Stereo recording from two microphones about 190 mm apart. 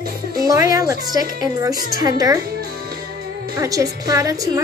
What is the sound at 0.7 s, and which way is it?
A woman's voice, 20° right (ahead or behind).